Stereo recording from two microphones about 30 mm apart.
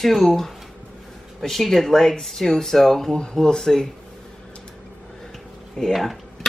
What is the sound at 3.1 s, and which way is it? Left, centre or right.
Speech, left.